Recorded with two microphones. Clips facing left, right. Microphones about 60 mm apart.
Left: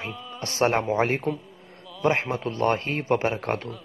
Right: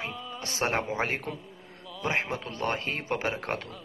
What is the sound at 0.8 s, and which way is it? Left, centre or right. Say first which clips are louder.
A man's voice: left 6 dB; left.